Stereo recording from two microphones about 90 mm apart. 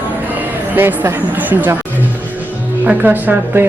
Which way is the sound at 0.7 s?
20° right (ahead or behind).